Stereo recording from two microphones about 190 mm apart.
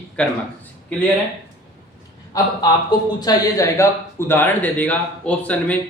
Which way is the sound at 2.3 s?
20° left (ahead or behind).